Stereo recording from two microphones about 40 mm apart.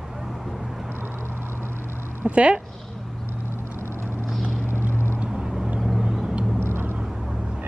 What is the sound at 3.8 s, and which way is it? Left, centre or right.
Vehicle, right.